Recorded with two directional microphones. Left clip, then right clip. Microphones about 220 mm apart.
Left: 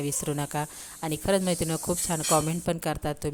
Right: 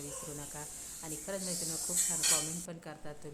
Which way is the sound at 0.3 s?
45° left (ahead or behind).